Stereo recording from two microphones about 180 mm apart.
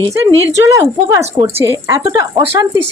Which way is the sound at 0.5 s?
20° right (ahead or behind).